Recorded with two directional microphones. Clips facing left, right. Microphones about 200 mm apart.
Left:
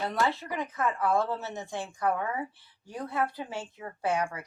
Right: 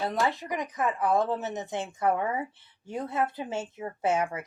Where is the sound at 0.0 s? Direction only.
20° right (ahead or behind).